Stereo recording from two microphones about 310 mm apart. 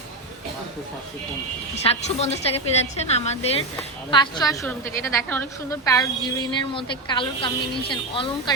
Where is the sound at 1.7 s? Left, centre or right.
Centre.